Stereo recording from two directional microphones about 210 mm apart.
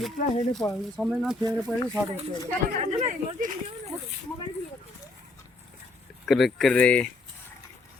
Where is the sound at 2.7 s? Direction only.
35° right (ahead or behind).